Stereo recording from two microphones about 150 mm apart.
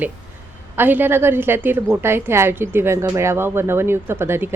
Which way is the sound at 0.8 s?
15° right (ahead or behind).